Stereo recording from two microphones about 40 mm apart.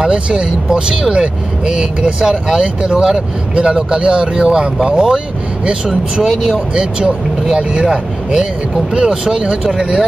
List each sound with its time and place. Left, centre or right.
0.0 s speech: right